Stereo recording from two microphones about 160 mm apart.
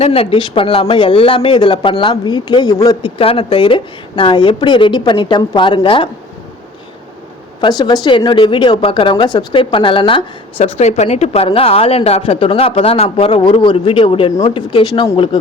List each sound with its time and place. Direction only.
0.0 s speech: 35° left (ahead or behind); by 3.1 s 20° left (ahead or behind)
3.2 s speech: 35° left (ahead or behind)
7.6 s speech: 25° left (ahead or behind)